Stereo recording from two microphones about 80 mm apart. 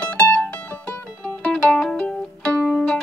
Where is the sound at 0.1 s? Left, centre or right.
Centre.